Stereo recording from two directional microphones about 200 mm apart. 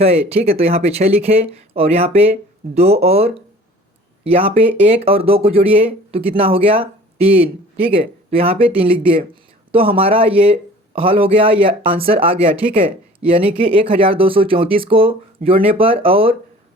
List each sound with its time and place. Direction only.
0.0 s speech: 30° right (ahead or behind)